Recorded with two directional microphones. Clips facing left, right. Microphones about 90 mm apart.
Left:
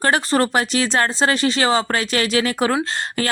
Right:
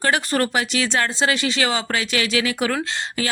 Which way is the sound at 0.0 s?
35° left (ahead or behind).